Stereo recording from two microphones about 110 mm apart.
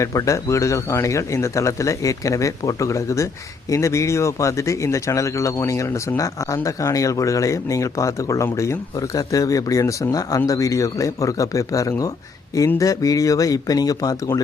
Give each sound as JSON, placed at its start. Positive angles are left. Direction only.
{"t": 0.0, "sound": "speech", "side_deg": 30}